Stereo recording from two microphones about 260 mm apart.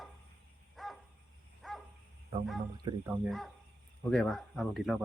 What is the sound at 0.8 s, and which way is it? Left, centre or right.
Dog, centre.